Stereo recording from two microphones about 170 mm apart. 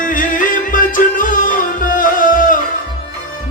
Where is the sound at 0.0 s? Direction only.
50° left (ahead or behind).